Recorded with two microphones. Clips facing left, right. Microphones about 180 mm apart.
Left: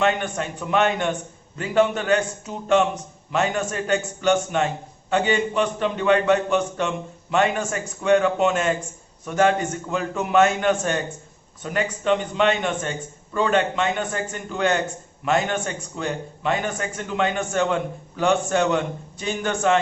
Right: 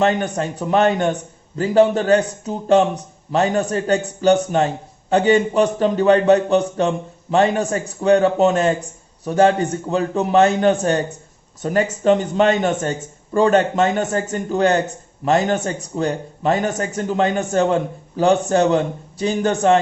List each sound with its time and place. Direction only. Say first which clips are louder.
0.0 s a man's voice: right 4 dB; 35° right (ahead or behind)